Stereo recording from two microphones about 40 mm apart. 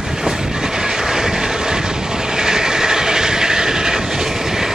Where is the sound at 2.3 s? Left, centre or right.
Centre.